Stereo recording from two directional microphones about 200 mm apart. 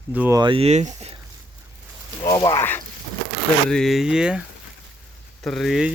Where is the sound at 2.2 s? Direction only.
15° left (ahead or behind); by 5.9 s centre (ahead or behind).